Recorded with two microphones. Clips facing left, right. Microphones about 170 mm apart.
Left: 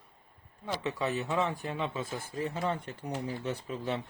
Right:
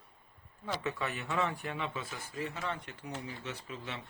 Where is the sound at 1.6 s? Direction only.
35° left (ahead or behind).